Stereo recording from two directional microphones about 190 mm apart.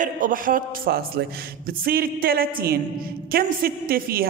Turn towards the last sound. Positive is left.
turn(degrees=-55)  # may be behind; listen again after turning